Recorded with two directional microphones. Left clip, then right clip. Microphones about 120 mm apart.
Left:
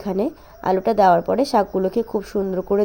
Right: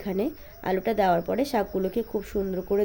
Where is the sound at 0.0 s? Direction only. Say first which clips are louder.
Left 6 dB; 30° left (ahead or behind).